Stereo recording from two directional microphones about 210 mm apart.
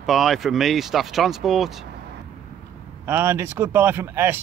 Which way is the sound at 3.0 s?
10° right (ahead or behind).